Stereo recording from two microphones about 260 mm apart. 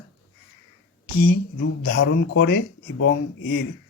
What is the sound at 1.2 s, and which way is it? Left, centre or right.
Speech, left.